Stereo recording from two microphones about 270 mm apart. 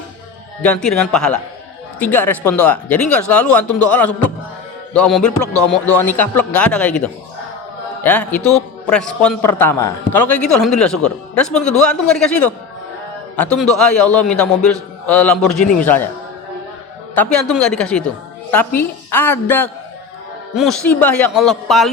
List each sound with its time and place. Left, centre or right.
0.6 s a man's voice: centre
5.9 s speech: left
6.1 s a man's voice: centre
8.4 s speech: centre
8.9 s a woman's voice: centre
17.2 s a man's voice: centre